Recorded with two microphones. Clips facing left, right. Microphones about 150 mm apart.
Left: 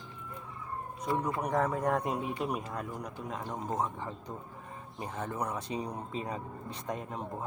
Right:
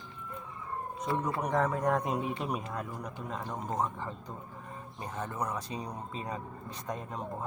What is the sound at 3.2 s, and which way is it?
Speech, 15° left (ahead or behind).